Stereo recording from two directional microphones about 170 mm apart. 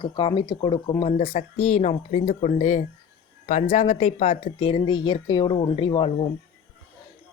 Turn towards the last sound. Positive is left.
turn(degrees=25)  # may be behind; listen again after turning